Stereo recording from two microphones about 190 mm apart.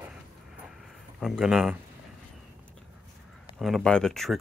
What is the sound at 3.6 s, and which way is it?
Speech, centre (ahead or behind).